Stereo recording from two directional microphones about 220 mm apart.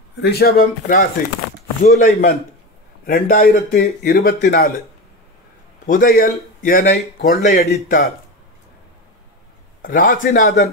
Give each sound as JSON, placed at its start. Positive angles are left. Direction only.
{"t": 0.2, "sound": "speech", "side_deg": 45}
{"t": 5.9, "sound": "speech", "side_deg": 40}
{"t": 9.8, "sound": "speech", "side_deg": 40}